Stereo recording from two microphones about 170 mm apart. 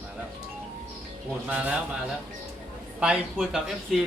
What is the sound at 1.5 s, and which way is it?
Speech, 10° right (ahead or behind).